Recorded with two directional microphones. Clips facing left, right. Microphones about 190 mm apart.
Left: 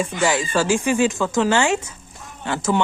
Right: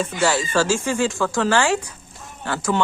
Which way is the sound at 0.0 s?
15° left (ahead or behind).